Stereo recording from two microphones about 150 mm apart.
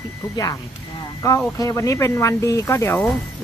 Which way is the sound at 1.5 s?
20° left (ahead or behind).